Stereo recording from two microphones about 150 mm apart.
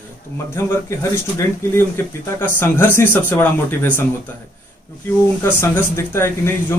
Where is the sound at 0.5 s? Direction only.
20° left (ahead or behind).